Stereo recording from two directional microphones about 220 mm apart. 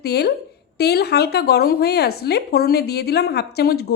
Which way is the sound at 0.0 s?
45° left (ahead or behind).